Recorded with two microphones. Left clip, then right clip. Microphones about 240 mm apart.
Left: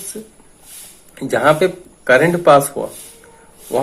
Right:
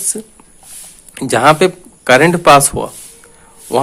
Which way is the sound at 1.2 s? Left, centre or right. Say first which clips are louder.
Right 4 dB; right.